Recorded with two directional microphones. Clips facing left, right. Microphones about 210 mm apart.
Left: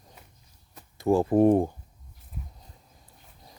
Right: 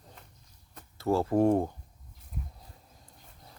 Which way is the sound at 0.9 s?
15° left (ahead or behind).